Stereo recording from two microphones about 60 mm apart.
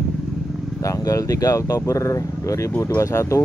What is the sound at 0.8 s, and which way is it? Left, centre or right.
Speech, left.